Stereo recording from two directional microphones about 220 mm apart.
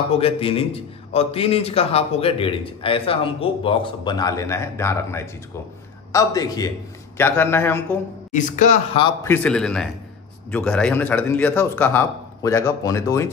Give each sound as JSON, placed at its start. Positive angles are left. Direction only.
{"t": 0.2, "sound": "a man's voice", "side_deg": 25}
{"t": 8.3, "sound": "speech", "side_deg": 35}
{"t": 9.0, "sound": "a man's voice", "side_deg": 10}